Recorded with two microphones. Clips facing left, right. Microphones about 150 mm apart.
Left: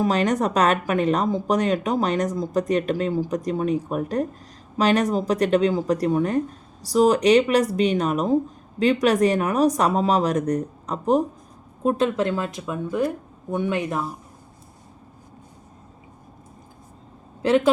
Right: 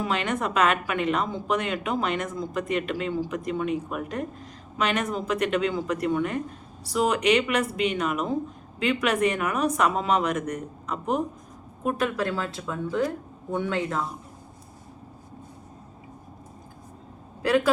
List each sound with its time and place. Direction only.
0.0 s speech: 40° left (ahead or behind); by 14.0 s 15° left (ahead or behind)
17.4 s speech: 20° left (ahead or behind)